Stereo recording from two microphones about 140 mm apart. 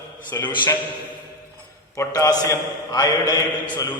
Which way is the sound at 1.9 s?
20° left (ahead or behind).